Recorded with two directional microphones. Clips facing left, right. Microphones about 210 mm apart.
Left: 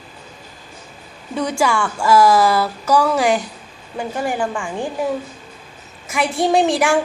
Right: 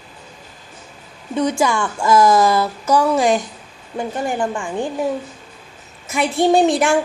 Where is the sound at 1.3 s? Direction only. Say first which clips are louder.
Right 1 dB; 20° right (ahead or behind).